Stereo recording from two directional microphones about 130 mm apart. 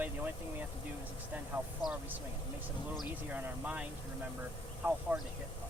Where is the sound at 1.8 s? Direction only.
30° left (ahead or behind).